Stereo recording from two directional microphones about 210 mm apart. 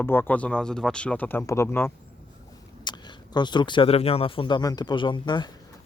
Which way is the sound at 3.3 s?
20° left (ahead or behind).